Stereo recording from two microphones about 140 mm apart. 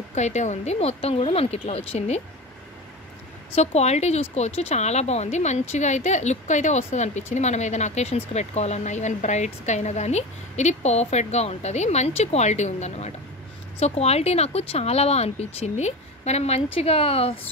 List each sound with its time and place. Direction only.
0.1 s speech: 55° left (ahead or behind)
3.5 s speech: 50° left (ahead or behind)